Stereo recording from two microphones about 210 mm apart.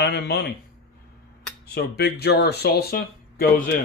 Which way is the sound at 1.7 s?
50° left (ahead or behind).